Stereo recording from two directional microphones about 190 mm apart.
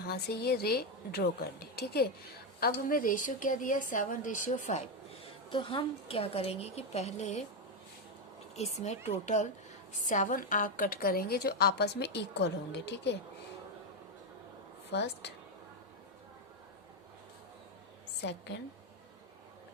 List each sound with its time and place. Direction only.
0.1 s a woman's voice: 55° left (ahead or behind); by 7.4 s 35° left (ahead or behind)
8.5 s a woman's voice: 35° left (ahead or behind); by 13.1 s 65° left (ahead or behind)
14.9 s a woman's voice: 65° left (ahead or behind)